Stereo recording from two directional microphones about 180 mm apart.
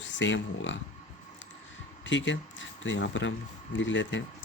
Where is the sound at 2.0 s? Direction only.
90° left.